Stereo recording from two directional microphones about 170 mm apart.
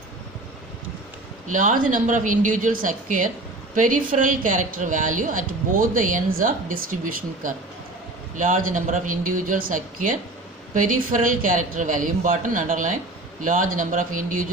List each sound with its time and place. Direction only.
1.5 s a woman's voice: 50° right (ahead or behind)